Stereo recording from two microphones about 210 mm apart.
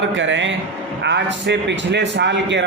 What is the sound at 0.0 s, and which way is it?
A man's voice, 65° right (ahead or behind).